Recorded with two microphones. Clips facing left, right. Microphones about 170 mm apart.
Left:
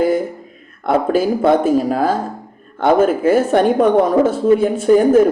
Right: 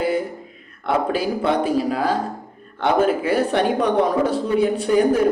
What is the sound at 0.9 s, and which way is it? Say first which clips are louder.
A woman's voice: left 6 dB; 45° left (ahead or behind).